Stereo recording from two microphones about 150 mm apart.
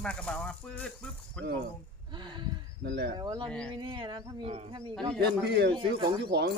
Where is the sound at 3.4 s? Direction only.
5° left (ahead or behind).